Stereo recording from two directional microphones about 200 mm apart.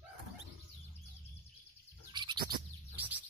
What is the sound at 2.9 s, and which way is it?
Chirp, 10° right (ahead or behind).